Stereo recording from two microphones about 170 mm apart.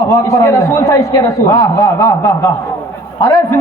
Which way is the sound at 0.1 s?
20° left (ahead or behind).